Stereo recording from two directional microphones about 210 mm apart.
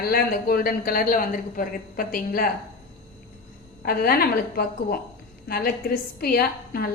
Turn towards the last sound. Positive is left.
turn(degrees=45)  # may be behind; listen again after turning